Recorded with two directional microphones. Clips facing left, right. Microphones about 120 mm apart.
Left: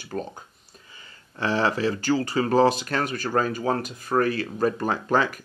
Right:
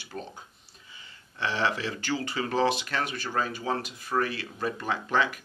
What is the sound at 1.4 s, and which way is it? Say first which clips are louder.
Speech: left 5 dB; 40° left (ahead or behind).